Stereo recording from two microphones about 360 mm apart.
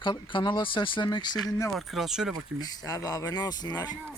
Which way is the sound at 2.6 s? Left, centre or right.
Centre.